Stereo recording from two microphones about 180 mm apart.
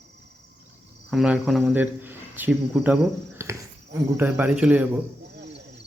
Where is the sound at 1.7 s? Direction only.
10° right (ahead or behind).